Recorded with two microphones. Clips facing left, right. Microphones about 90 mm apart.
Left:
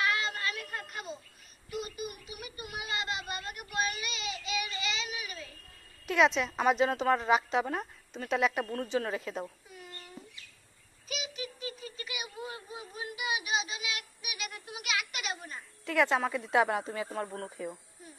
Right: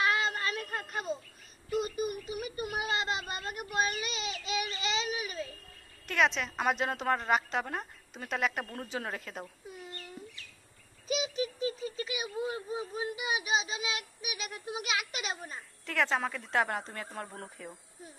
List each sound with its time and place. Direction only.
0.0 s a sound: 35° right (ahead or behind)
6.0 s a woman's voice: centre (ahead or behind)
11.1 s a child's voice: 30° right (ahead or behind)
15.8 s a woman's voice: 5° left (ahead or behind)